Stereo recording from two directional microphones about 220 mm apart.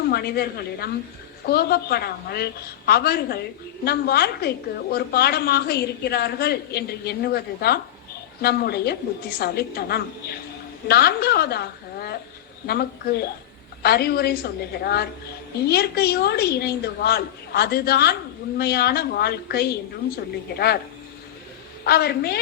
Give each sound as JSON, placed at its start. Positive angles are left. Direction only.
{"t": 0.1, "sound": "a woman's voice", "side_deg": 45}
{"t": 21.8, "sound": "a woman's voice", "side_deg": 45}